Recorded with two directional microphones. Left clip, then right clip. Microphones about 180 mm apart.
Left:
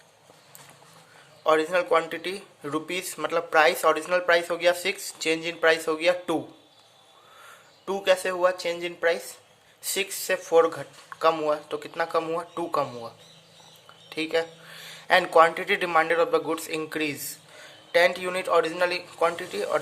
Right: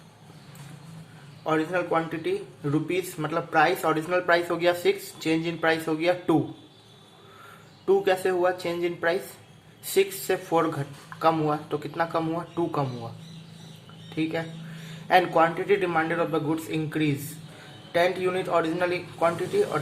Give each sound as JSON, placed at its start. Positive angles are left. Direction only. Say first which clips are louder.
{"t": 1.5, "sound": "speech", "louder": "left 4 dB", "side_deg": 45}
{"t": 7.9, "sound": "speech", "louder": "right 1 dB", "side_deg": 35}
{"t": 14.1, "sound": "a man's voice", "louder": "left 3 dB", "side_deg": 45}